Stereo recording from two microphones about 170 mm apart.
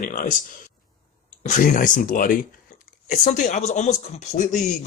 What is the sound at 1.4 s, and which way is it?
Speech, 50° left (ahead or behind).